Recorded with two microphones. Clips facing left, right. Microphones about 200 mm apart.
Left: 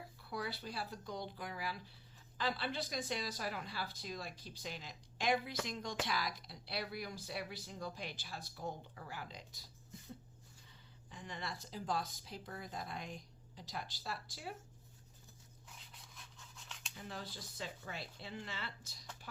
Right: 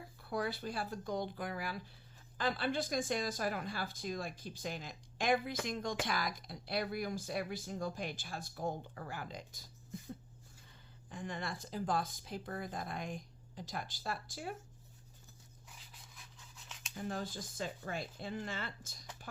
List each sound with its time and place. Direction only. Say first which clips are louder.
0.2 s speech: right 6 dB; 50° right (ahead or behind)
11.1 s speech: right 5 dB; 50° right (ahead or behind)
16.9 s speech: right 8 dB; 45° right (ahead or behind)